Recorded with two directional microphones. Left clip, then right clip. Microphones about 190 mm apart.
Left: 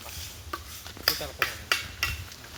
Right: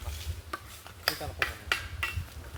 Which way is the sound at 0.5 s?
60° left (ahead or behind).